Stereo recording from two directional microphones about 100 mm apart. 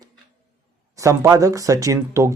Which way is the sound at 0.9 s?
30° right (ahead or behind).